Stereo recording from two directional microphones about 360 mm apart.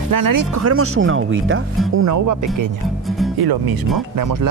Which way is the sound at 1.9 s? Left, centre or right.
Right.